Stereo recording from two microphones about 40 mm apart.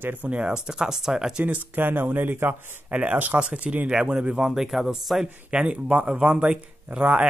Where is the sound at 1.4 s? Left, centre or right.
Right.